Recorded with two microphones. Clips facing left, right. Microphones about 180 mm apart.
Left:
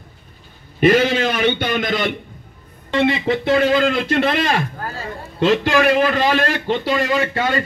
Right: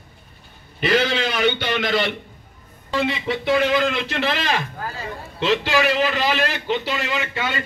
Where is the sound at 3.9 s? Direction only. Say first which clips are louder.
Left 6 dB; 55° left (ahead or behind).